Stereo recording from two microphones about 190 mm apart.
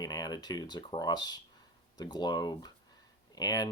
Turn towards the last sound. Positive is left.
turn(degrees=20)  # may be behind; listen again after turning